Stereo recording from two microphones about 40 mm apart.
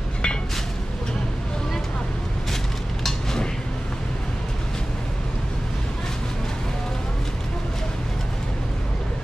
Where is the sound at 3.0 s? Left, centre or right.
Centre.